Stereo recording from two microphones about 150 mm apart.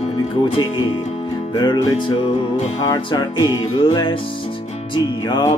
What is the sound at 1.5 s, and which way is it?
Music, 30° left (ahead or behind).